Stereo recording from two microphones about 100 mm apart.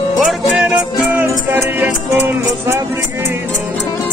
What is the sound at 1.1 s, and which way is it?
Music, 20° right (ahead or behind).